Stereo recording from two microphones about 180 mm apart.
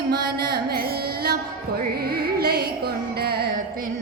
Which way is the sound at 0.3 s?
60° right (ahead or behind).